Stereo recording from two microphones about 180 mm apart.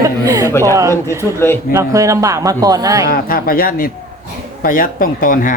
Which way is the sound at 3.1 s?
55° left (ahead or behind).